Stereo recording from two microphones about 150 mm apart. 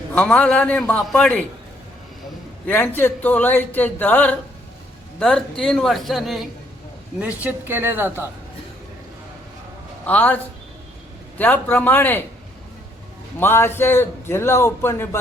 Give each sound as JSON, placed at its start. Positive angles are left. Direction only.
{"t": 0.1, "sound": "a man's voice", "side_deg": 5}
{"t": 2.6, "sound": "a man's voice", "side_deg": 10}
{"t": 10.1, "sound": "a man's voice", "side_deg": 10}
{"t": 13.4, "sound": "a man's voice", "side_deg": 15}